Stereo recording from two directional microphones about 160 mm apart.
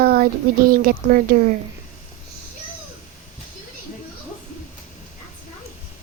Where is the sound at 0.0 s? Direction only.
70° right (ahead or behind).